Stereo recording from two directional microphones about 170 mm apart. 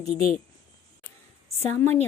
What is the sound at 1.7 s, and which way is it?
Speech, 10° left (ahead or behind).